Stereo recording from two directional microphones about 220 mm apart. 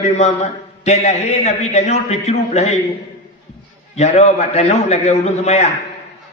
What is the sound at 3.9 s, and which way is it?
A man's voice, 30° left (ahead or behind).